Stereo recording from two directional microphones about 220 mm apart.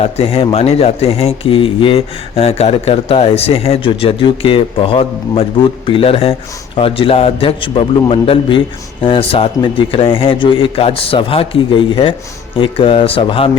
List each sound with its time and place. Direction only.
0.0 s speech: 25° left (ahead or behind)